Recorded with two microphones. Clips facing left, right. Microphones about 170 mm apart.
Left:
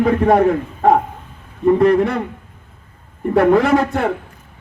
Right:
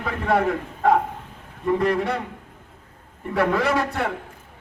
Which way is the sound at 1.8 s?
50° left (ahead or behind).